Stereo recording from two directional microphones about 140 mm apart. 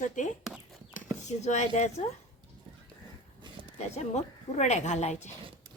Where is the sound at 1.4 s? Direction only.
55° left (ahead or behind).